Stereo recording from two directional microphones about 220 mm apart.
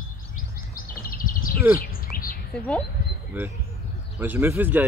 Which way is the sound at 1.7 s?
40° left (ahead or behind).